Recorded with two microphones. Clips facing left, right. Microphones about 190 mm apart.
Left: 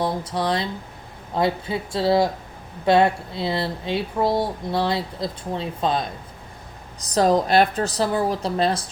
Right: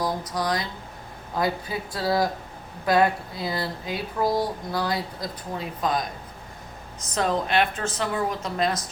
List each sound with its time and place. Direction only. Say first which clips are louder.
0.0 s speech: left 3 dB; 30° left (ahead or behind)